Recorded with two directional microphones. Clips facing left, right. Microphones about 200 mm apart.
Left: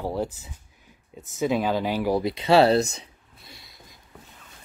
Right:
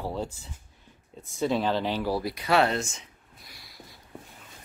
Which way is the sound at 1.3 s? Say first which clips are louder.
Left 2 dB; 10° left (ahead or behind).